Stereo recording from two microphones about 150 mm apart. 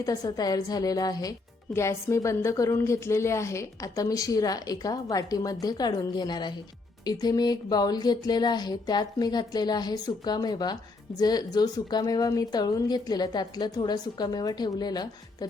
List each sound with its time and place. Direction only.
0.0 s a woman's voice: 25° left (ahead or behind)